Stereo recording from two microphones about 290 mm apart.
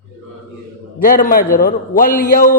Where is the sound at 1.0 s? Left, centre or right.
Left.